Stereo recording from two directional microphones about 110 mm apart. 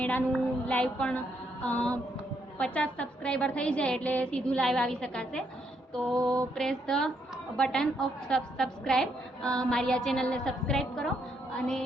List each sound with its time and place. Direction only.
0.0 s a woman's voice: 15° left (ahead or behind)
6.1 s mantra: 30° right (ahead or behind)
6.6 s a woman's voice: 5° left (ahead or behind)